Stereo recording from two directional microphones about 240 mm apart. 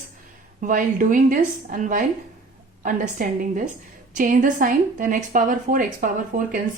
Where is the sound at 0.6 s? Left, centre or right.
Right.